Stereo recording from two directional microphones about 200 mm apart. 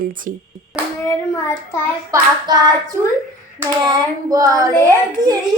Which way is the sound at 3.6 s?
20° right (ahead or behind).